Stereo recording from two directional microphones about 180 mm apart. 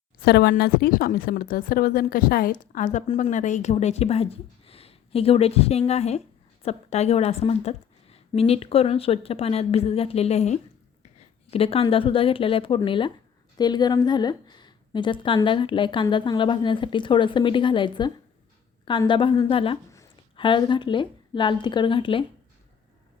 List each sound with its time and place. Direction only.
0.2 s a woman's voice: 60° left (ahead or behind); by 22.2 s 30° left (ahead or behind)